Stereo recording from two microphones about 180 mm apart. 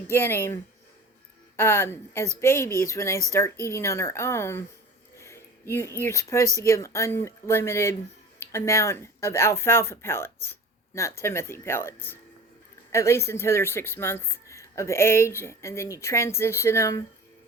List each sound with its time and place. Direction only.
0.1 s speech: 15° left (ahead or behind)